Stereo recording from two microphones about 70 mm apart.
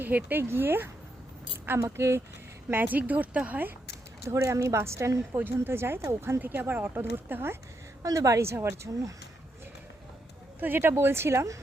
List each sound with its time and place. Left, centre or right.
0.0 s speech: right
2.6 s speech: right
4.3 s a woman's voice: right
5.4 s speech: right
6.4 s speech: right
8.0 s a woman's voice: right
8.4 s speech: right
10.6 s speech: right